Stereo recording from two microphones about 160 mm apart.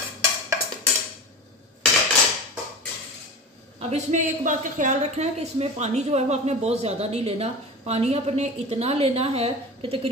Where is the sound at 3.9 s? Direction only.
50° right (ahead or behind).